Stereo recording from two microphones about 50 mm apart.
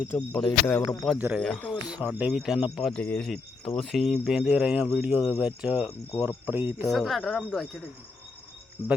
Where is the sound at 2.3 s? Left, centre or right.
Centre.